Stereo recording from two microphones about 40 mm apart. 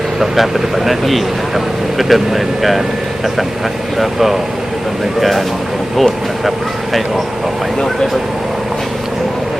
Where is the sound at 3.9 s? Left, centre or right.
Centre.